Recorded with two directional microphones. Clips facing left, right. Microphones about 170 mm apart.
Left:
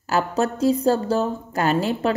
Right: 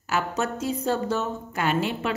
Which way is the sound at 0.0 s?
35° left (ahead or behind).